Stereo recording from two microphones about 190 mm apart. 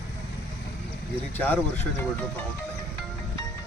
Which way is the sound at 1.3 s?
10° left (ahead or behind).